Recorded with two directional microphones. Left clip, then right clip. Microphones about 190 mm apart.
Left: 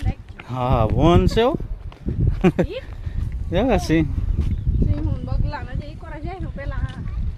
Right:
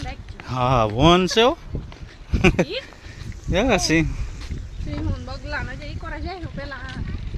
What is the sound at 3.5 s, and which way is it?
Speech, 15° left (ahead or behind).